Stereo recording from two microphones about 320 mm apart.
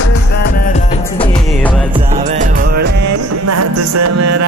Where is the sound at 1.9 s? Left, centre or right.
Right.